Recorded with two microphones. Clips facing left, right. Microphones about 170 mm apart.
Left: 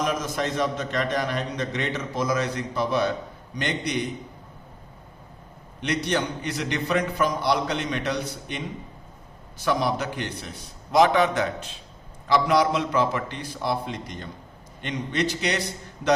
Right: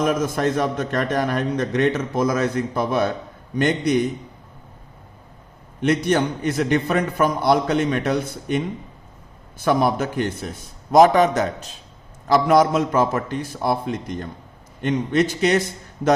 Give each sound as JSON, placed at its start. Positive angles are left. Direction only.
{"t": 0.0, "sound": "a man's voice", "side_deg": -50}
{"t": 5.8, "sound": "a man's voice", "side_deg": -50}